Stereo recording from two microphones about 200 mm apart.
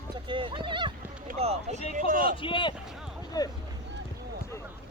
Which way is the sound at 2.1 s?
45° right (ahead or behind).